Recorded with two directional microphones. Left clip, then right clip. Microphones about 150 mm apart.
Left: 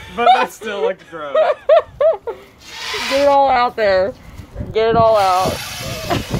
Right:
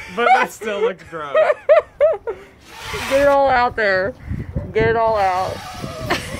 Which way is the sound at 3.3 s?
15° right (ahead or behind).